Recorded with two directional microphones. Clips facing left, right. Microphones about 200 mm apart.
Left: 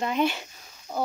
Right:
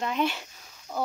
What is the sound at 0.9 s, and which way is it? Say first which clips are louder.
Speech: left 2 dB; 25° left (ahead or behind).